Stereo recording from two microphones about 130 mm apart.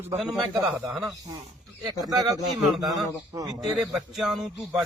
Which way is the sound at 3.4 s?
30° right (ahead or behind).